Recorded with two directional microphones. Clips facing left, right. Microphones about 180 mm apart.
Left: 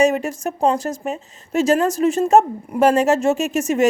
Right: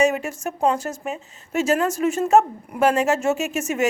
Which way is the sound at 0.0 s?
35° left (ahead or behind).